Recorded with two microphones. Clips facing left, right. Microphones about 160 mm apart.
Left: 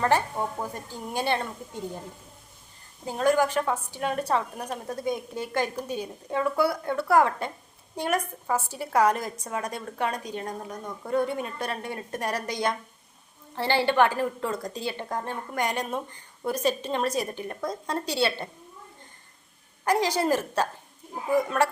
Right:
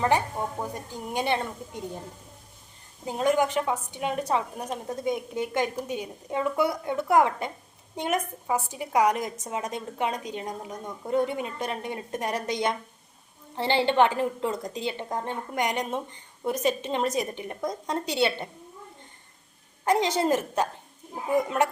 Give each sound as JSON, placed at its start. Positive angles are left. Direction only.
{"t": 0.6, "sound": "a woman's voice", "side_deg": -20}
{"t": 3.1, "sound": "a woman's voice", "side_deg": -20}
{"t": 19.8, "sound": "a woman's voice", "side_deg": -25}